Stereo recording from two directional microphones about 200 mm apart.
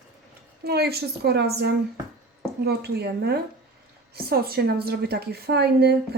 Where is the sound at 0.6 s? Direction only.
50° right (ahead or behind).